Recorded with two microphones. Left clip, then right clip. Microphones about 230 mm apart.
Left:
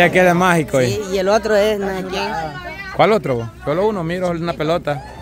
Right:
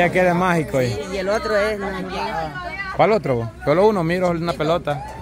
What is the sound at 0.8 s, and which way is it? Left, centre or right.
Speech, left.